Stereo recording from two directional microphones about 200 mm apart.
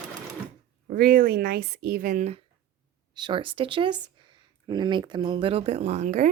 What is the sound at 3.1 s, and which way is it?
Speech, 20° right (ahead or behind).